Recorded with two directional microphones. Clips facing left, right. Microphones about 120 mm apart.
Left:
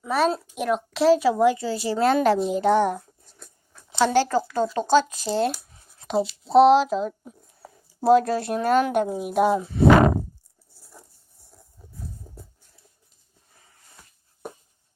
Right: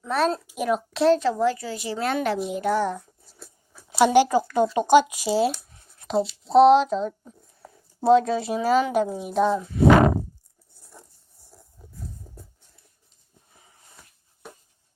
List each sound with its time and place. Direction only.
0.0 s a child's voice: 5° left (ahead or behind)
1.5 s a woman's voice: 30° left (ahead or behind)
2.5 s a woman's voice: 25° left (ahead or behind)
2.9 s a sound: centre (ahead or behind)
4.5 s speech: 15° right (ahead or behind); by 9.6 s 10° left (ahead or behind)
10.8 s a sound: centre (ahead or behind)